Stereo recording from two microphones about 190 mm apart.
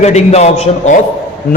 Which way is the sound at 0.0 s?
35° left (ahead or behind).